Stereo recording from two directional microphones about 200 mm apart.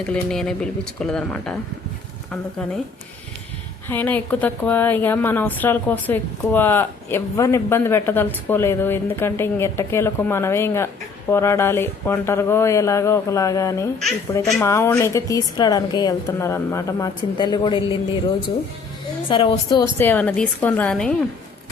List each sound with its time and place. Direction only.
0.0 s speech: 5° left (ahead or behind)
3.8 s a woman's voice: 10° left (ahead or behind); by 17.9 s 25° left (ahead or behind)
19.3 s a woman's voice: 25° left (ahead or behind)
20.0 s a woman's voice: 10° left (ahead or behind)